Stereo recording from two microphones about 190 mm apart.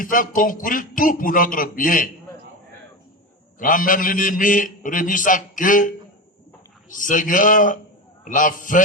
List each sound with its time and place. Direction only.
0.0 s a man's voice: 45° left (ahead or behind)
3.6 s a man's voice: 45° left (ahead or behind)
6.9 s a man's voice: 45° left (ahead or behind)